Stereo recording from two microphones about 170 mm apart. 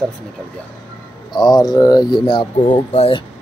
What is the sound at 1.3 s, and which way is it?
Speech, 25° left (ahead or behind).